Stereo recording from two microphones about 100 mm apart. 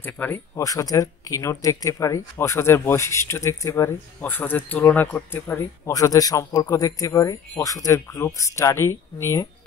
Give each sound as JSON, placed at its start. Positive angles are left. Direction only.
{"t": 0.0, "sound": "speech", "side_deg": 20}
{"t": 0.6, "sound": "speech", "side_deg": 35}
{"t": 5.9, "sound": "a man's voice", "side_deg": 35}